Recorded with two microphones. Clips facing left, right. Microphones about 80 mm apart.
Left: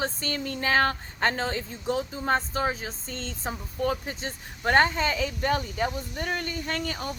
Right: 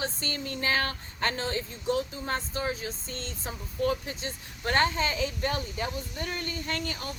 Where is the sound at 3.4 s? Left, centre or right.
Left.